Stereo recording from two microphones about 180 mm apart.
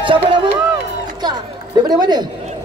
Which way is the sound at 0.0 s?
25° right (ahead or behind).